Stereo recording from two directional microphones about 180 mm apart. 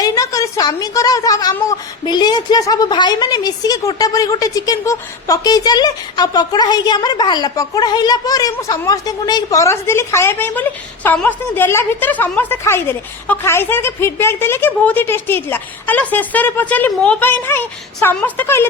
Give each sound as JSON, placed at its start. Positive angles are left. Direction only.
{"t": 0.0, "sound": "a woman's voice", "side_deg": 20}